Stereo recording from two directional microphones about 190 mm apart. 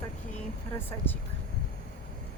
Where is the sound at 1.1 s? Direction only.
10° left (ahead or behind).